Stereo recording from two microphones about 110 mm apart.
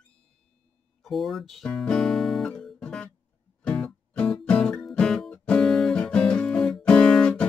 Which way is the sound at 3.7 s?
10° left (ahead or behind).